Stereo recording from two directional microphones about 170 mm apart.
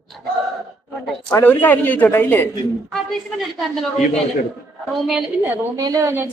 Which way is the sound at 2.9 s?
Centre (ahead or behind).